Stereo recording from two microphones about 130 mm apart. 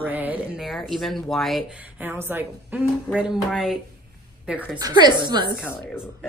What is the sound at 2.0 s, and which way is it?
Speech, 15° right (ahead or behind).